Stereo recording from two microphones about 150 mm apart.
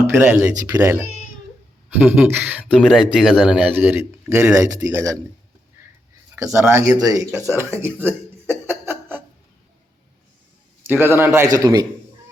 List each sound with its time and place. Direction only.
0.2 s speech: 15° right (ahead or behind)
2.0 s speech: 15° right (ahead or behind)
6.4 s speech: 20° right (ahead or behind)
7.5 s a sound: 15° right (ahead or behind)
10.8 s a man's voice: 15° right (ahead or behind)